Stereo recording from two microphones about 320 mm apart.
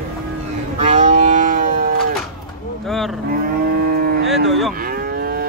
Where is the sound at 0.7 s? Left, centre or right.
Right.